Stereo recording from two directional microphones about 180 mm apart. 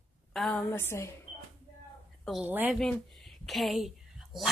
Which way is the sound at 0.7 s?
15° left (ahead or behind).